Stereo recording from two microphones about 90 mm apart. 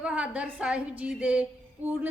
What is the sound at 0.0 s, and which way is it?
A woman's voice, 15° right (ahead or behind).